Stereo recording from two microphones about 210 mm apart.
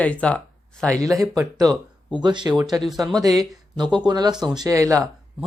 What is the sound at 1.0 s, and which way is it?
Speech, 15° right (ahead or behind).